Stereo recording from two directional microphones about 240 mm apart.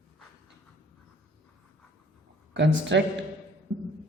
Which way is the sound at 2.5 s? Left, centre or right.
Right.